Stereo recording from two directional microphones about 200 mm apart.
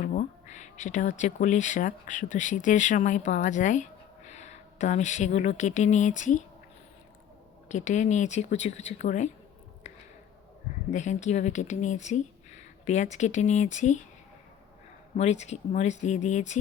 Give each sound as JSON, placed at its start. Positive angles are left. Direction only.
{"t": 0.0, "sound": "speech", "side_deg": 40}
{"t": 7.7, "sound": "speech", "side_deg": 35}
{"t": 10.9, "sound": "speech", "side_deg": 35}
{"t": 15.1, "sound": "speech", "side_deg": 35}